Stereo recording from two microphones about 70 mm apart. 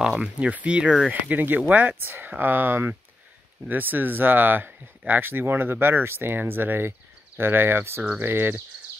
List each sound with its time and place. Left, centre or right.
0.0 s speech: centre
0.4 s speech: centre
1.2 s speech: right
8.0 s speech: centre
8.3 s speech: right